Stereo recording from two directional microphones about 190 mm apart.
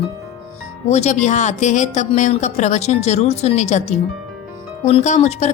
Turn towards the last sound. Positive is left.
turn(degrees=35)  # may be behind; listen again after turning